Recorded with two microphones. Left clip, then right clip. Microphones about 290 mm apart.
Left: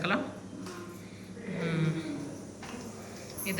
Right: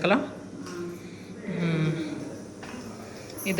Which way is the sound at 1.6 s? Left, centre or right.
Centre.